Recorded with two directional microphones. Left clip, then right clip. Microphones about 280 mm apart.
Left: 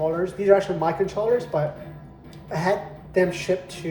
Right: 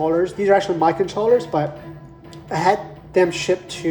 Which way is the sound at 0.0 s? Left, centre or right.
Right.